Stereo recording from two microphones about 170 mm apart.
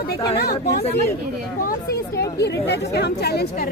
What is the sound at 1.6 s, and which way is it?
A woman's voice, 65° left (ahead or behind).